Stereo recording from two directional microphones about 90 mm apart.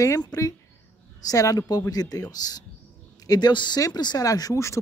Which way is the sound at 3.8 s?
45° left (ahead or behind).